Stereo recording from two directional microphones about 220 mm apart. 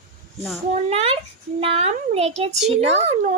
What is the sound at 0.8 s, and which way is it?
A child's voice, 25° right (ahead or behind).